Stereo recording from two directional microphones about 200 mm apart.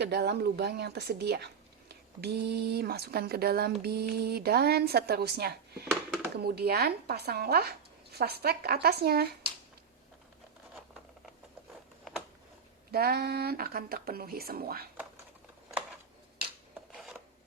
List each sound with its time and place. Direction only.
0.0 s speech: 55° right (ahead or behind)
12.9 s speech: 50° right (ahead or behind)
16.9 s filing: 5° right (ahead or behind)